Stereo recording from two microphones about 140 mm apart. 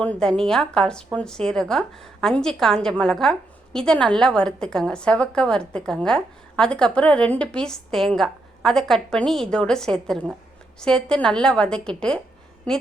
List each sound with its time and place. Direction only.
0.0 s a woman's voice: 5° left (ahead or behind)